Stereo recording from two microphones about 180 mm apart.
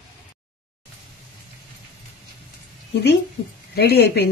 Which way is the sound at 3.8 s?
60° left (ahead or behind).